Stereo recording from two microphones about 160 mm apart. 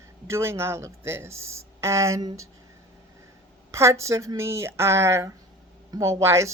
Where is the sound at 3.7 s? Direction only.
20° right (ahead or behind).